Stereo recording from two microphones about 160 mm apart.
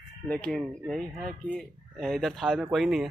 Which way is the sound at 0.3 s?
5° left (ahead or behind).